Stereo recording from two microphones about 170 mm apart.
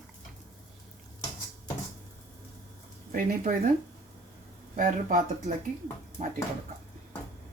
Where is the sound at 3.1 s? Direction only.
55° right (ahead or behind).